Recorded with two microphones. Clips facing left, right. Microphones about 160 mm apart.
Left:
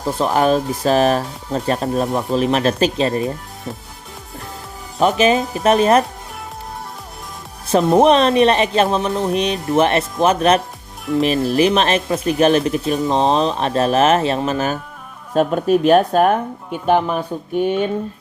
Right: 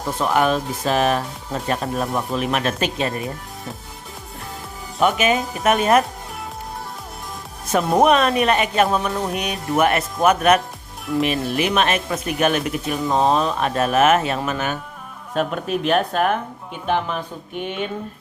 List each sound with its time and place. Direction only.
0.2 s speech: 35° left (ahead or behind)
4.9 s speech: 35° left (ahead or behind)
7.7 s speech: 30° left (ahead or behind)